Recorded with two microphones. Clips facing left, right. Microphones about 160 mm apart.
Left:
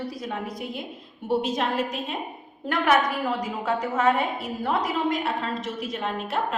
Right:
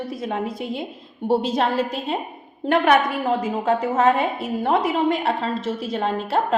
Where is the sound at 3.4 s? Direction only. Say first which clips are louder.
Right 6 dB; 25° right (ahead or behind).